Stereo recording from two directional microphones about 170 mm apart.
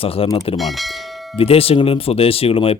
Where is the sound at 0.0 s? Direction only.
35° left (ahead or behind).